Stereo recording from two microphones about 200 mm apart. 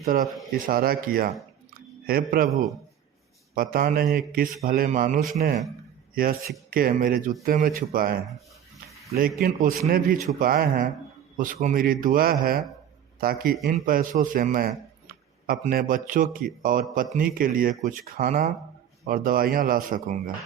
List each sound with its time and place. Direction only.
0.0 s a man's voice: 45° right (ahead or behind)